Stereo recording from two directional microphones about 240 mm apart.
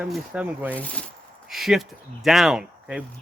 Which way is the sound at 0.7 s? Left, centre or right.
Centre.